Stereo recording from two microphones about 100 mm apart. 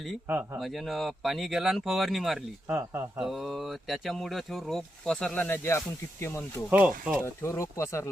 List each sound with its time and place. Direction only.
0.3 s speech: 20° right (ahead or behind)
0.6 s speech: centre (ahead or behind)
2.6 s speech: 30° right (ahead or behind)
3.2 s speech: centre (ahead or behind); by 5.5 s 15° left (ahead or behind)
5.6 s speech: 25° left (ahead or behind)
6.7 s speech: 15° right (ahead or behind)
7.3 s speech: 25° left (ahead or behind)